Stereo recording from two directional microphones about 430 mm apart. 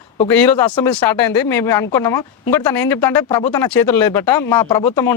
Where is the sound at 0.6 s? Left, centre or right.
Left.